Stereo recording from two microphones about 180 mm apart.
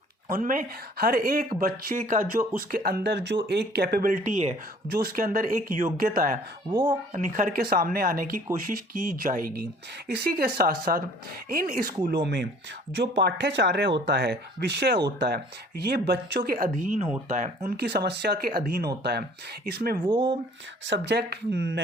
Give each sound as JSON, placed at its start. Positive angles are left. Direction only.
{"t": 0.3, "sound": "speech", "side_deg": -50}
{"t": 4.9, "sound": "speech", "side_deg": -55}
{"t": 12.0, "sound": "speech", "side_deg": -65}
{"t": 20.8, "sound": "speech", "side_deg": -75}